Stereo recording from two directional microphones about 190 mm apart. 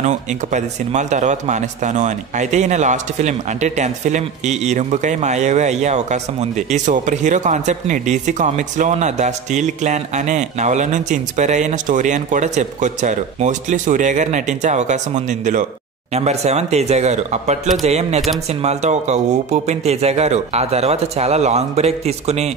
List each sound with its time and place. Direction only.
0.0 s speech: 40° right (ahead or behind)